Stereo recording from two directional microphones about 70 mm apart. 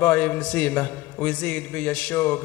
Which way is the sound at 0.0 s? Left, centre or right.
Centre.